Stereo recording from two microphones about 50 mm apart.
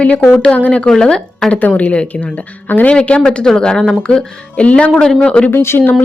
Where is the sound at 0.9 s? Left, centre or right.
Centre.